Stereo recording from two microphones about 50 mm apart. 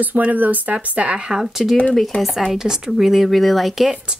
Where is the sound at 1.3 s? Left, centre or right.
Centre.